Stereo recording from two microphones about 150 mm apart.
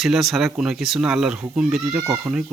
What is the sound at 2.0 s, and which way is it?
Speech, 20° right (ahead or behind).